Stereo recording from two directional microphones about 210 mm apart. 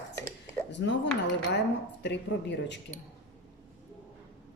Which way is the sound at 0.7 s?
60° left (ahead or behind).